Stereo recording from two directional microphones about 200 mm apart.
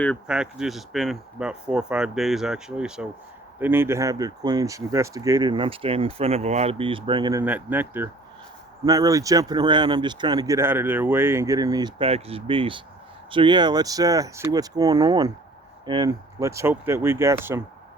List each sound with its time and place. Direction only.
0.3 s speech: 5° right (ahead or behind); by 7.4 s 20° right (ahead or behind)
7.4 s speech: 10° right (ahead or behind)